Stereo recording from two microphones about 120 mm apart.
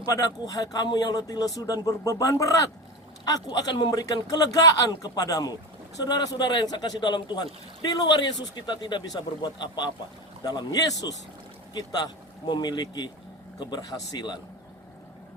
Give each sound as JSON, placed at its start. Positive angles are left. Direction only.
{"t": 0.0, "sound": "speech", "side_deg": 30}